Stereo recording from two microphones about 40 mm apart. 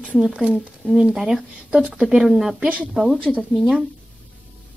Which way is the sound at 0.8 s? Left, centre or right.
Centre.